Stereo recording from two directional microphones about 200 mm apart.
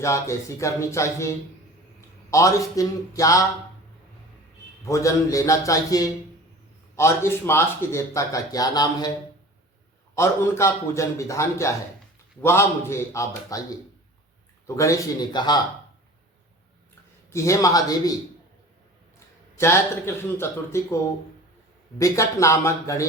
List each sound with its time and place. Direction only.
0.0 s a man's voice: 15° left (ahead or behind)
4.9 s speech: 15° left (ahead or behind)
10.2 s speech: 15° left (ahead or behind)
14.8 s a man's voice: 15° left (ahead or behind)
17.2 s speech: 15° left (ahead or behind)
19.5 s speech: 15° left (ahead or behind)